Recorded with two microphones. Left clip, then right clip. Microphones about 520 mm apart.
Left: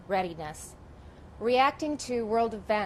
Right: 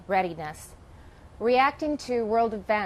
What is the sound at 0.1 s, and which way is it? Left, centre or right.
A woman's voice, right.